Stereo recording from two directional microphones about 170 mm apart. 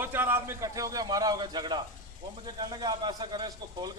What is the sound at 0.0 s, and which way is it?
Speech, 10° right (ahead or behind).